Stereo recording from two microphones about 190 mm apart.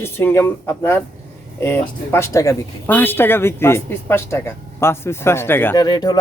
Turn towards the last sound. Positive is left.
turn(degrees=20)  # may be behind; listen again after turning